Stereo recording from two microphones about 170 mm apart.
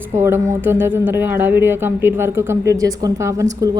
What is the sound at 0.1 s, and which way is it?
A woman's voice, 15° right (ahead or behind).